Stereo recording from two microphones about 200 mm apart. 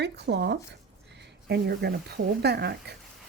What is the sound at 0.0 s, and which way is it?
Speech, 60° right (ahead or behind).